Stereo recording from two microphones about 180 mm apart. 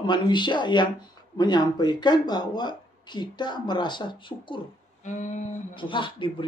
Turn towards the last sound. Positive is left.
turn(degrees=25)  # may be behind; listen again after turning